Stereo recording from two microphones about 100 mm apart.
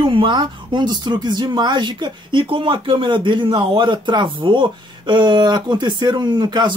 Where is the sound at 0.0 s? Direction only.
55° right (ahead or behind).